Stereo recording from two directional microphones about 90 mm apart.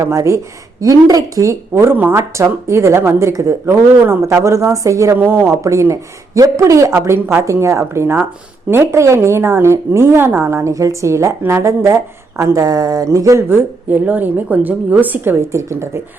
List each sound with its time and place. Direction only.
0.0 s a woman's voice: 35° right (ahead or behind)
5.1 s a woman's voice: 25° right (ahead or behind)
5.5 s a woman's voice: 35° right (ahead or behind)
13.9 s a woman's voice: 20° right (ahead or behind)